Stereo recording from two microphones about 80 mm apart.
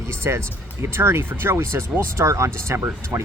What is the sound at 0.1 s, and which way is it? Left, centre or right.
Speech, right.